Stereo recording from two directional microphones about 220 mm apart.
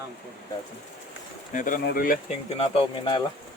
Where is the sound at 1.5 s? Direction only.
35° left (ahead or behind).